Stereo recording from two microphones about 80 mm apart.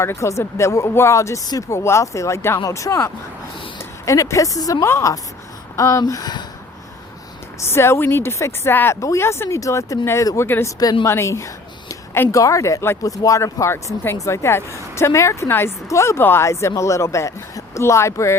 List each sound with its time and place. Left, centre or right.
0.0 s a woman's voice: left
4.9 s speech: left
7.6 s a woman's voice: left
9.0 s speech: left
9.6 s speech: left
11.0 s a sound: left
12.3 s speech: left
13.0 s speech: left